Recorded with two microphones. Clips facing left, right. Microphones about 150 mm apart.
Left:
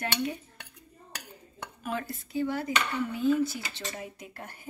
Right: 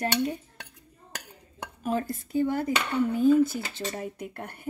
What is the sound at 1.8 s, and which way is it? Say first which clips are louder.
Speech: right 6 dB; 35° right (ahead or behind).